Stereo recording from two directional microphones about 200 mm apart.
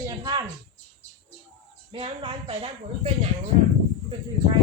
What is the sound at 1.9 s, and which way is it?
Speech, 25° right (ahead or behind).